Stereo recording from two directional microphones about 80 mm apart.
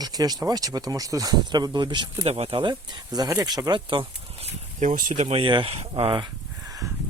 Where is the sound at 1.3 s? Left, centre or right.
Right.